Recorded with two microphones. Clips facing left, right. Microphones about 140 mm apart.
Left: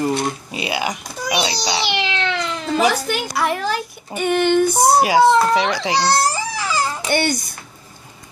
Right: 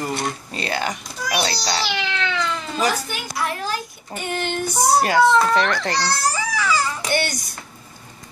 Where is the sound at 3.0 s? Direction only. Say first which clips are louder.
Left 6 dB; 70° left (ahead or behind).